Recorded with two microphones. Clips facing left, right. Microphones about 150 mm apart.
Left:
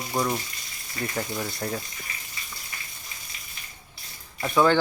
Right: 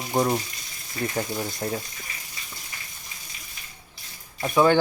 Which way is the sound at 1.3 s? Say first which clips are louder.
Right 2 dB; 20° right (ahead or behind).